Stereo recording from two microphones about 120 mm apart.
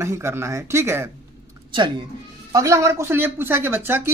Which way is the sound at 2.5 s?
25° right (ahead or behind).